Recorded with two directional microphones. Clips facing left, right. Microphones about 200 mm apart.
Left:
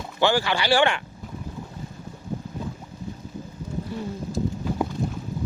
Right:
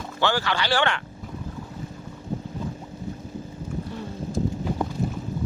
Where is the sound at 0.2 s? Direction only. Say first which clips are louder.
Left 3 dB; 15° left (ahead or behind).